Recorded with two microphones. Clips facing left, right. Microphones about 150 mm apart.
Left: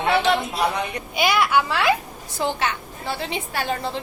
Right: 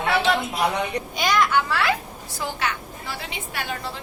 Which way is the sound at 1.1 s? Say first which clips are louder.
Left 2 dB; 10° left (ahead or behind).